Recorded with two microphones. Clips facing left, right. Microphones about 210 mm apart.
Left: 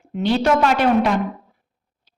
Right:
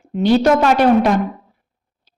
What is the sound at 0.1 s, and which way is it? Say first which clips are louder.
A woman's voice: right 5 dB; 40° right (ahead or behind).